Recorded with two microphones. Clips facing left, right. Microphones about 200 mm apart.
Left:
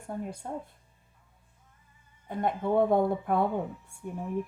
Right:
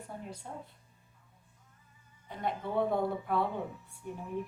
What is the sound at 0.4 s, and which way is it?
Speech, 50° left (ahead or behind).